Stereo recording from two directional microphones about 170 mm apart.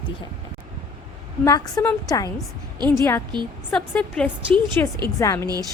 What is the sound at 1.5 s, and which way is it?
A woman's voice, 20° left (ahead or behind).